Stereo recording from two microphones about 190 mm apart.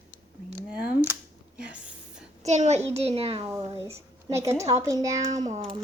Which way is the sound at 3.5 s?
15° right (ahead or behind).